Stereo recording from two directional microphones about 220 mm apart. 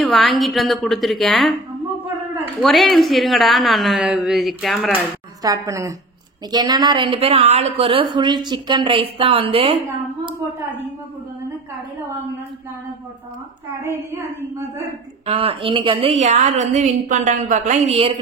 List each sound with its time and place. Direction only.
0.0 s a woman's voice: centre (ahead or behind)
2.6 s a woman's voice: centre (ahead or behind)
5.4 s a woman's voice: 15° right (ahead or behind)
13.7 s a woman's voice: 10° right (ahead or behind)
15.2 s a woman's voice: 25° right (ahead or behind)